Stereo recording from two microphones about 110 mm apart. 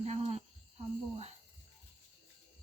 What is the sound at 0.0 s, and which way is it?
Cricket, 70° right (ahead or behind).